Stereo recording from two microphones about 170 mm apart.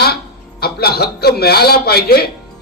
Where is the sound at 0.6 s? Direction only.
65° left (ahead or behind).